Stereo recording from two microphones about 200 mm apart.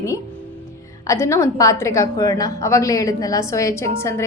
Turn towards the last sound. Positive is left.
turn(degrees=15)  # may be behind; listen again after turning